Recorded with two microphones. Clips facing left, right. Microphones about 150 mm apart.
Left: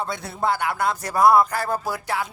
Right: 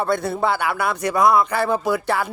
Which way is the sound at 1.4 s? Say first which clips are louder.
Right 5 dB; 70° right (ahead or behind).